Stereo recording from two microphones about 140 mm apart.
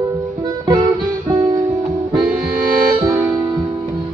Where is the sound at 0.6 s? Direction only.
30° right (ahead or behind).